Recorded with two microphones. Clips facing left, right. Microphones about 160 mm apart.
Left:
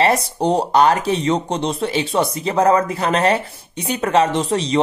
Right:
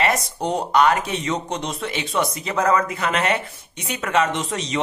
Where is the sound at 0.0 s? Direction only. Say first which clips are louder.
Left 5 dB; 30° left (ahead or behind).